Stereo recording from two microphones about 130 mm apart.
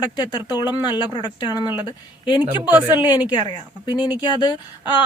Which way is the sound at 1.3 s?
35° left (ahead or behind).